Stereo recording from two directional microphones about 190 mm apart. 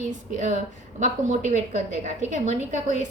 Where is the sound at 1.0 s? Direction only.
40° right (ahead or behind).